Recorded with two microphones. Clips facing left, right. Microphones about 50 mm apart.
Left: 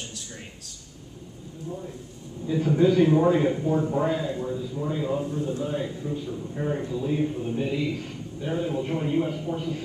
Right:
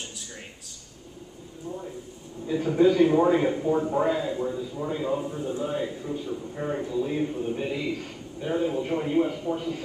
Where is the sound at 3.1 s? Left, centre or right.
Centre.